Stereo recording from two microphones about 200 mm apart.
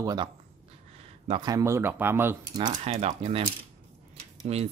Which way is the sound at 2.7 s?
30° right (ahead or behind).